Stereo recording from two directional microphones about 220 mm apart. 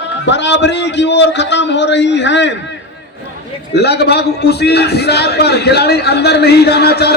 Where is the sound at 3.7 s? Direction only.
50° left (ahead or behind).